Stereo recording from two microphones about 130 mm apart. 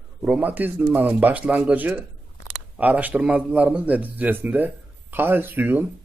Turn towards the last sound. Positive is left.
turn(degrees=-15)  # may be behind; listen again after turning